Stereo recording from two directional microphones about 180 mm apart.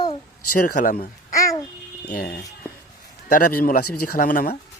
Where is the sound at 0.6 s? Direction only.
50° left (ahead or behind).